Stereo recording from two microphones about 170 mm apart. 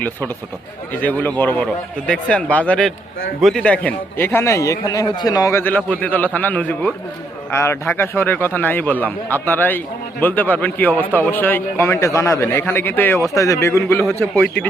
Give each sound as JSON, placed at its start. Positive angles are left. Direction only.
{"t": 1.0, "sound": "a man's voice", "side_deg": 10}